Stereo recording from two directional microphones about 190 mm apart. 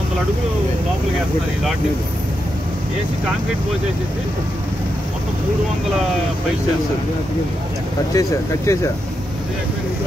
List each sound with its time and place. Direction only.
8.1 s speech: 15° left (ahead or behind)